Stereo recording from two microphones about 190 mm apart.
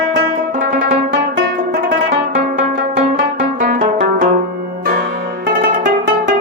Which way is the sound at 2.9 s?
45° right (ahead or behind).